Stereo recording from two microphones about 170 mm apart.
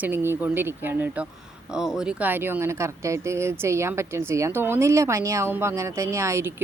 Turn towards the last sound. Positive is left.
turn(degrees=-15)  # may be behind; listen again after turning